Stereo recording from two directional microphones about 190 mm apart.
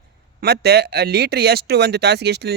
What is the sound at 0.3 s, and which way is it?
Speech, 55° right (ahead or behind).